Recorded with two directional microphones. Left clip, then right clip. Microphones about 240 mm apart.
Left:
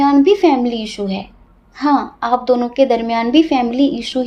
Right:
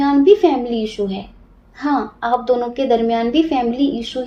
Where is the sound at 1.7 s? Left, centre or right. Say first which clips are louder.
Left 4 dB; left.